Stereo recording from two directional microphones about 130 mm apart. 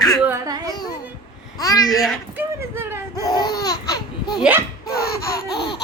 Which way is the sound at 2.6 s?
20° right (ahead or behind).